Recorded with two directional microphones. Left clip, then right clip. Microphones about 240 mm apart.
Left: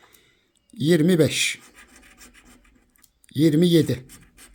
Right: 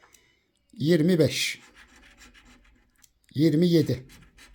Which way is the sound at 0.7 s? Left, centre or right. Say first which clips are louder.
Left 3 dB; centre.